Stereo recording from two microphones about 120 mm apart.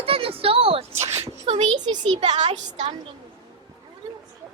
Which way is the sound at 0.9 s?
25° right (ahead or behind).